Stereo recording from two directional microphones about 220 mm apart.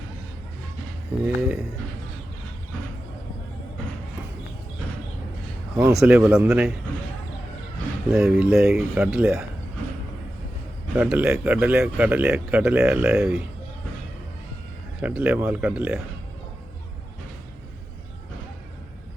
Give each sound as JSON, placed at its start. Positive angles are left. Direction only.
{"t": 1.2, "sound": "speech", "side_deg": 0}
{"t": 5.7, "sound": "speech", "side_deg": -5}
{"t": 8.1, "sound": "speech", "side_deg": -5}
{"t": 10.9, "sound": "speech", "side_deg": -5}
{"t": 15.0, "sound": "speech", "side_deg": -5}